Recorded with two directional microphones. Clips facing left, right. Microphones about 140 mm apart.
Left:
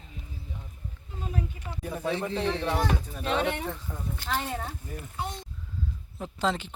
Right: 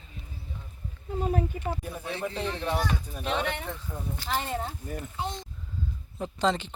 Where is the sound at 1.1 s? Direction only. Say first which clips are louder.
Right 7 dB; 50° right (ahead or behind).